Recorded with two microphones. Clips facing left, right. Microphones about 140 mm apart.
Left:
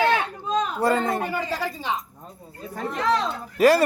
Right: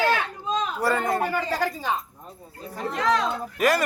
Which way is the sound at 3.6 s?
30° left (ahead or behind).